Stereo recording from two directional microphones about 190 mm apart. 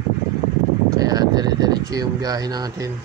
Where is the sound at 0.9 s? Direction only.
20° right (ahead or behind).